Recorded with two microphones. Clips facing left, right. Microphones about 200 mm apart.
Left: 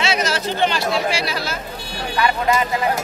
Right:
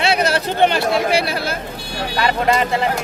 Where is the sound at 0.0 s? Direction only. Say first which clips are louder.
Right 3 dB; 60° right (ahead or behind).